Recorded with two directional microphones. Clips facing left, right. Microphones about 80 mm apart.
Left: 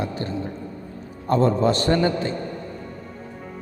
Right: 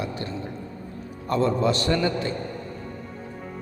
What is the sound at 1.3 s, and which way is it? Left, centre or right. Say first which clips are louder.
A man's voice: left 3 dB; left.